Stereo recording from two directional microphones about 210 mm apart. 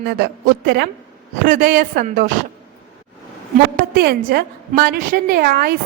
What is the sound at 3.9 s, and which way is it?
A woman's voice, 50° right (ahead or behind).